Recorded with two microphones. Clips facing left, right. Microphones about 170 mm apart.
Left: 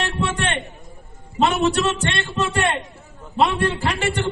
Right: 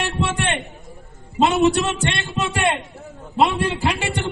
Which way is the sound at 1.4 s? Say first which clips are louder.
Right 2 dB; 20° right (ahead or behind).